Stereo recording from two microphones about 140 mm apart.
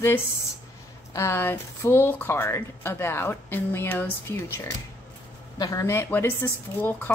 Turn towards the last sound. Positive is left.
turn(degrees=15)  # may be behind; listen again after turning